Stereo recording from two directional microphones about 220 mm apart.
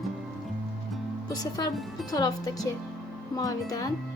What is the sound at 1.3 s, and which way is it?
Speech, 15° left (ahead or behind).